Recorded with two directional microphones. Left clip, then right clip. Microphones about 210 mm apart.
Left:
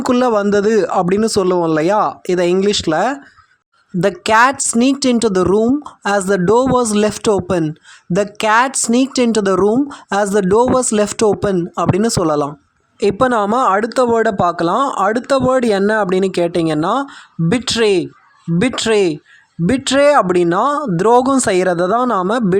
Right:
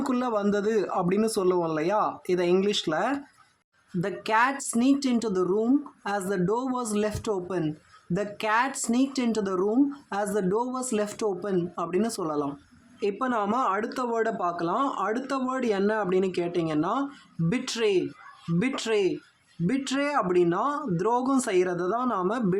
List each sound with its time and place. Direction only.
0.0 s speech: 35° left (ahead or behind)